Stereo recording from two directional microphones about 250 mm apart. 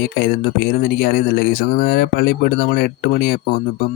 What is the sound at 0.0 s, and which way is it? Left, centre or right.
Speech, left.